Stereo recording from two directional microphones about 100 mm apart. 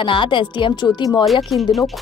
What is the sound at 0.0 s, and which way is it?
A woman's voice, 55° left (ahead or behind).